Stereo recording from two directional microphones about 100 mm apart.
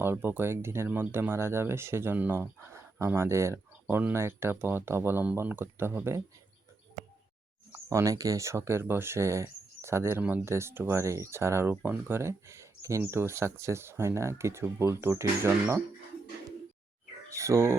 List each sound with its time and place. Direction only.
0.0 s speech: 25° right (ahead or behind)
7.9 s speech: 30° right (ahead or behind)
17.2 s a sound: 30° right (ahead or behind)